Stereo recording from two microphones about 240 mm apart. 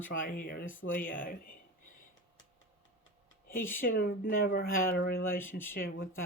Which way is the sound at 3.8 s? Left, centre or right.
Left.